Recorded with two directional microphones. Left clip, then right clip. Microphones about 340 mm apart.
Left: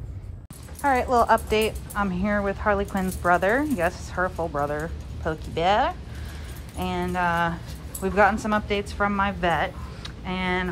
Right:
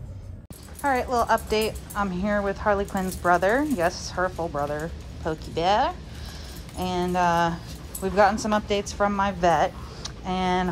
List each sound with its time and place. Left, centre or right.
0.8 s a woman's voice: centre